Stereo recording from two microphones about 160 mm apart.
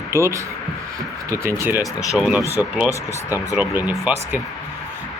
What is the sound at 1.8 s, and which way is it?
Speech, 20° left (ahead or behind).